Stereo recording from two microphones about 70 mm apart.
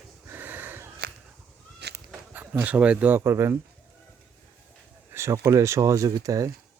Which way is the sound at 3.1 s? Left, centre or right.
Right.